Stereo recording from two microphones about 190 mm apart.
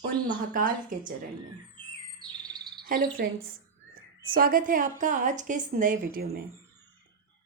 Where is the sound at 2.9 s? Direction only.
45° right (ahead or behind).